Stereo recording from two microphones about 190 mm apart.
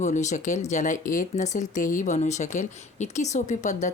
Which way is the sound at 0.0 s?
40° left (ahead or behind).